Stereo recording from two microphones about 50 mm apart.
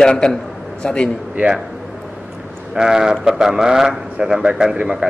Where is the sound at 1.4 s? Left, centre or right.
Right.